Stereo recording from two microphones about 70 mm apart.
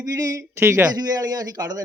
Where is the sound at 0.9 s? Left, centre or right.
Right.